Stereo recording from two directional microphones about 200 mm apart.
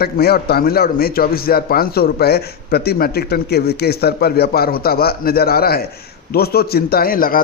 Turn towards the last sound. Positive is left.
turn(degrees=45)  # may be behind; listen again after turning